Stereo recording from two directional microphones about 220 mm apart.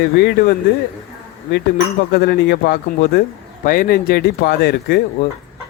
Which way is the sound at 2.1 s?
45° left (ahead or behind).